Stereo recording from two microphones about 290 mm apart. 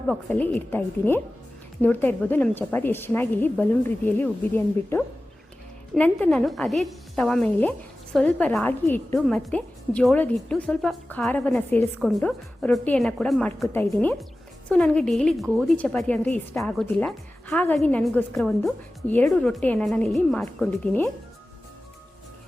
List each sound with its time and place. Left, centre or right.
0.1 s a woman's voice: centre